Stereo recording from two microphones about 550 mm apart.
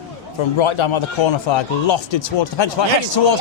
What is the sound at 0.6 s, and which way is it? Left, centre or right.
A man's voice, left.